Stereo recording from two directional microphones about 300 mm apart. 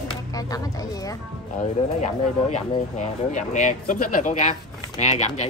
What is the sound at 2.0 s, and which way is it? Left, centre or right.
Speech, left.